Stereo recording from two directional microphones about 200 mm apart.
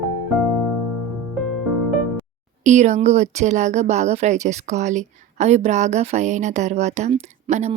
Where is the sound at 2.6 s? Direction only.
35° right (ahead or behind).